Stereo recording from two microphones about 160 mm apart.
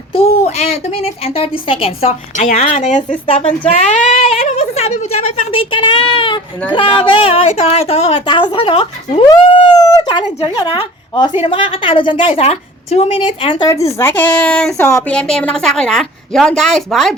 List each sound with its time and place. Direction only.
0.1 s a woman's voice: 40° left (ahead or behind)
4.0 s a woman's voice: 40° left (ahead or behind)
13.9 s a woman's voice: 15° left (ahead or behind)